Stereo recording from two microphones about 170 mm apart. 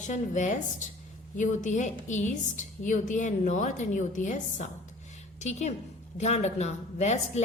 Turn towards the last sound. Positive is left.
turn(degrees=40)  # may be behind; listen again after turning